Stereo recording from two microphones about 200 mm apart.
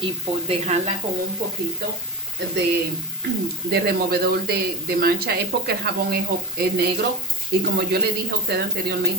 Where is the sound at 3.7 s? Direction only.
50° right (ahead or behind).